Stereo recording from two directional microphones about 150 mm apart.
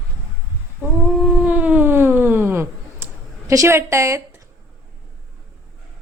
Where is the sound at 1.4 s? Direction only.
10° right (ahead or behind).